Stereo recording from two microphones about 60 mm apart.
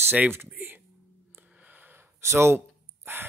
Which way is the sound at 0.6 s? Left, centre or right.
Right.